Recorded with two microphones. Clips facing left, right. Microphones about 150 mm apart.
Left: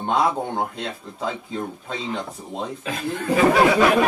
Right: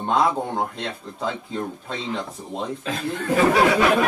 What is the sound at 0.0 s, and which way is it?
Speech, centre (ahead or behind).